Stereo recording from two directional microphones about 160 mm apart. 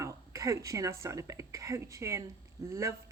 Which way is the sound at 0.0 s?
20° right (ahead or behind).